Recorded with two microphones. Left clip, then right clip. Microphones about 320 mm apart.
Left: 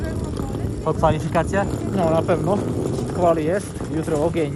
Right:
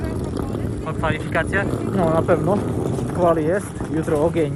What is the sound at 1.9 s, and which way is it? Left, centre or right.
Speech, centre.